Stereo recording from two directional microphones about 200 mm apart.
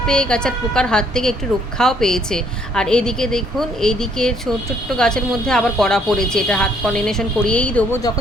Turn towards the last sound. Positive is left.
turn(degrees=5)  # may be behind; listen again after turning